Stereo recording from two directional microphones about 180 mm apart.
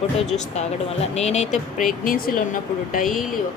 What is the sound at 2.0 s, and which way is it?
Speech, 50° left (ahead or behind).